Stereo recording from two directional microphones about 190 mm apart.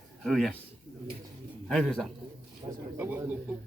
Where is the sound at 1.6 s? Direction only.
5° left (ahead or behind).